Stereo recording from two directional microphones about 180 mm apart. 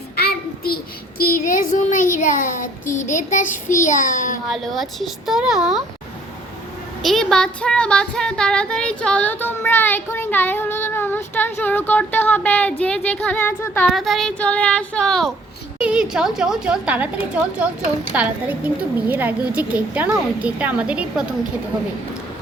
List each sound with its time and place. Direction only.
0.2 s child singing: 60° left (ahead or behind)
4.4 s a woman's voice: centre (ahead or behind)
7.0 s female singing: centre (ahead or behind)
13.9 s a woman's voice: centre (ahead or behind)